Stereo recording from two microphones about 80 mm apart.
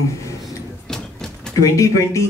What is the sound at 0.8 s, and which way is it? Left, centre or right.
Vehicle, centre.